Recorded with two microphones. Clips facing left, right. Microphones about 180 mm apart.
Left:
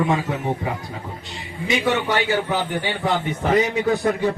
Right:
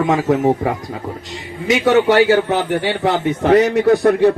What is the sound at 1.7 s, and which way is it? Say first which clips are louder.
A man's voice: right 8 dB; 75° right (ahead or behind).